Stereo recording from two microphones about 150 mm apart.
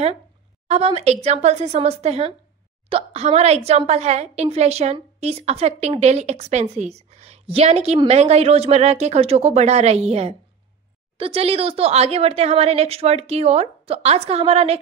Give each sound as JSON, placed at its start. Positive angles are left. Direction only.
{"t": 0.7, "sound": "a woman's voice", "side_deg": -45}